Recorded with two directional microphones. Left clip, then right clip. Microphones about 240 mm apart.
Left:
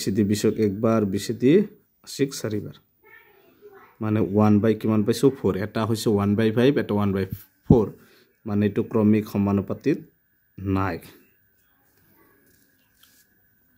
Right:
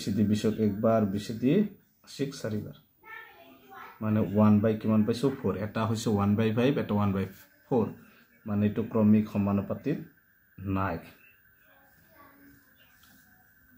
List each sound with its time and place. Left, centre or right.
0.0 s speech: left
4.0 s speech: left
8.5 s speech: left